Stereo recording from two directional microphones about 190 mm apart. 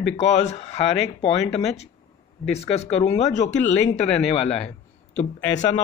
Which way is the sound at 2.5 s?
35° left (ahead or behind).